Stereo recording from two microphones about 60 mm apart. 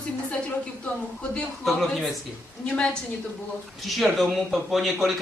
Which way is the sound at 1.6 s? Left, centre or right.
Centre.